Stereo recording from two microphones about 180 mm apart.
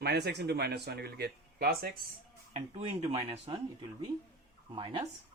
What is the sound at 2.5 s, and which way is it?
Speech, 30° right (ahead or behind).